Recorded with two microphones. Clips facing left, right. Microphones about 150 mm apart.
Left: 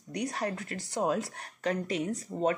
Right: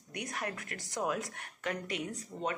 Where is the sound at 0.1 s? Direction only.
30° left (ahead or behind).